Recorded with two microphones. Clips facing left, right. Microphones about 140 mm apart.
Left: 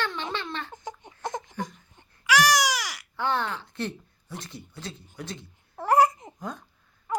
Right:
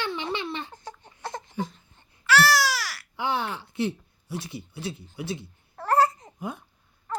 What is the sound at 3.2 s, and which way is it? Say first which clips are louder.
A child's voice: even; 10° right (ahead or behind).